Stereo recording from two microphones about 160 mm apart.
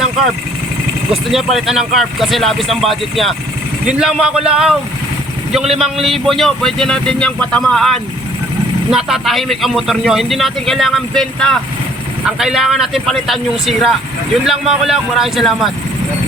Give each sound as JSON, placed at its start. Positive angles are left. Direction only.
{"t": 1.1, "sound": "speech", "side_deg": 0}